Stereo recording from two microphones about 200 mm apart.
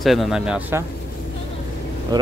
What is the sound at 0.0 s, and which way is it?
Speech, centre (ahead or behind).